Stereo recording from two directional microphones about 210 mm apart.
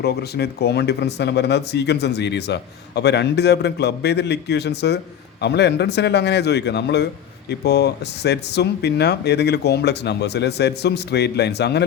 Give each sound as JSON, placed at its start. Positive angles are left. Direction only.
{"t": 0.0, "sound": "speech", "side_deg": 50}